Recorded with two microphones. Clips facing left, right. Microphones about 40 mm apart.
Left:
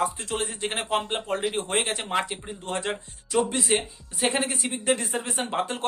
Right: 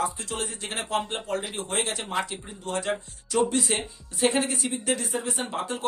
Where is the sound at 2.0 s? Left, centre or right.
Centre.